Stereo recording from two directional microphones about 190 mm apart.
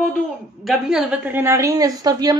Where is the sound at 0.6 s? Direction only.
Centre (ahead or behind); by 2.4 s 20° right (ahead or behind).